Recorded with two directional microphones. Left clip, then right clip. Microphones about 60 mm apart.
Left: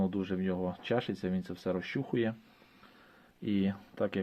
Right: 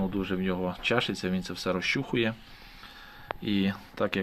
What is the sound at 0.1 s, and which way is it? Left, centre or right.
Speech, left.